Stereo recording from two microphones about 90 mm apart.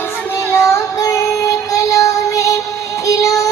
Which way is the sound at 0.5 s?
35° left (ahead or behind).